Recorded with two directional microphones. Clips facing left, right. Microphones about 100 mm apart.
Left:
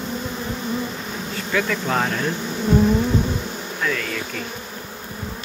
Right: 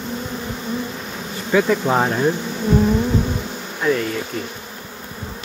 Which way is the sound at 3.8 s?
25° right (ahead or behind).